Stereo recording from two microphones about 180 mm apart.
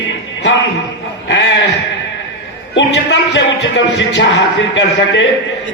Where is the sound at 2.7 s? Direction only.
80° left.